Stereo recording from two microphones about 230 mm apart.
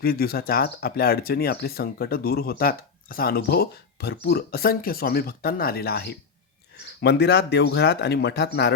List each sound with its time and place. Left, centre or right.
0.0 s speech: left